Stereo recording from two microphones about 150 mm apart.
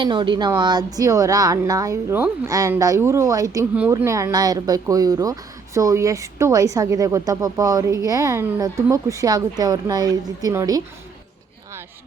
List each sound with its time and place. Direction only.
0.0 s a woman's voice: 30° right (ahead or behind)